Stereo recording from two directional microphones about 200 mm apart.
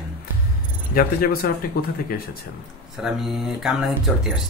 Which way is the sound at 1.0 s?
50° left (ahead or behind).